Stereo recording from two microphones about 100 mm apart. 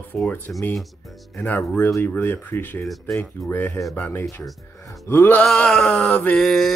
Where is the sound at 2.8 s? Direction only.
Centre (ahead or behind).